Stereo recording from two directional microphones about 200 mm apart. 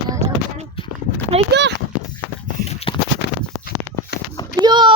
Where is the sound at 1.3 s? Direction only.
30° right (ahead or behind).